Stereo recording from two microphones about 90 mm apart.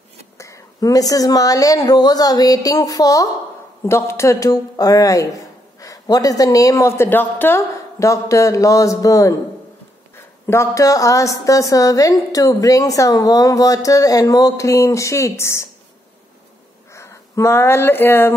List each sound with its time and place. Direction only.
0.4 s a woman's voice: 40° left (ahead or behind)
3.8 s a woman's voice: 30° left (ahead or behind)
16.9 s speech: 30° left (ahead or behind)